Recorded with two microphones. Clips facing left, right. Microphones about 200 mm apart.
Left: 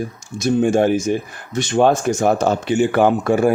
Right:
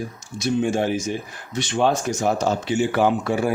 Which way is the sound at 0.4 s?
50° left (ahead or behind).